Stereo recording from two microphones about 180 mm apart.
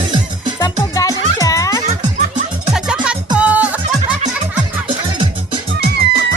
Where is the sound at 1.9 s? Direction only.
40° right (ahead or behind).